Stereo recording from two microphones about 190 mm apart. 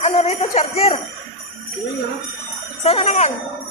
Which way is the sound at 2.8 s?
35° left (ahead or behind).